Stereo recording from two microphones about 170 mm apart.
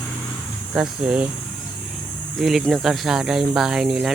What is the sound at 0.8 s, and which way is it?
Speech, 5° right (ahead or behind).